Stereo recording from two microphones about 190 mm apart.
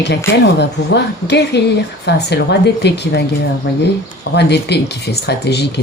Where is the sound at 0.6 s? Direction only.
65° left (ahead or behind).